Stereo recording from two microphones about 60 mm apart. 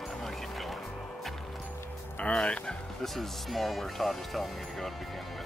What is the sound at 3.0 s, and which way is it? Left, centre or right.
Speech, centre.